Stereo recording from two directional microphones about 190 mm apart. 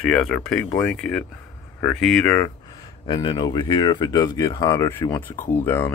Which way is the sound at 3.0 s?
25° left (ahead or behind).